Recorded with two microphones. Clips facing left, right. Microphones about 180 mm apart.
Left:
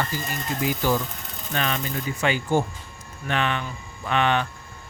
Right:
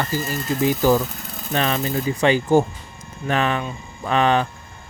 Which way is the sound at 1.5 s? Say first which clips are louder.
Right 6 dB; 35° right (ahead or behind).